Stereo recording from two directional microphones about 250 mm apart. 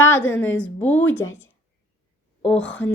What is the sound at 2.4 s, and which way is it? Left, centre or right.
Speech, centre.